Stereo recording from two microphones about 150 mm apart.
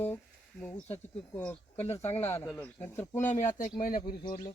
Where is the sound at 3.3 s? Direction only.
60° left (ahead or behind).